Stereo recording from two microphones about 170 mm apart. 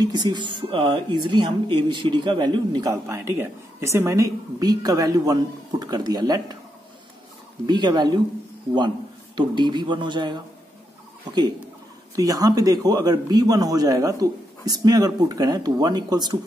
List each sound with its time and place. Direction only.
0.0 s speech: 25° right (ahead or behind)
7.6 s speech: 25° right (ahead or behind)
12.2 s speech: 20° right (ahead or behind)